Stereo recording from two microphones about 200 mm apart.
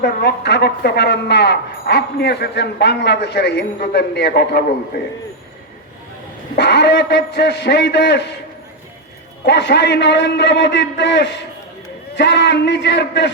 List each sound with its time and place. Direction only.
0.0 s a woman's voice: 55° left (ahead or behind)
6.6 s a woman's voice: 60° left (ahead or behind)
9.4 s a woman's voice: 55° left (ahead or behind)